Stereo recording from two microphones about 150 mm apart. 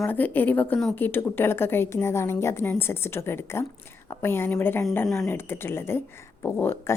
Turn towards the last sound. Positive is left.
turn(degrees=15)  # may be behind; listen again after turning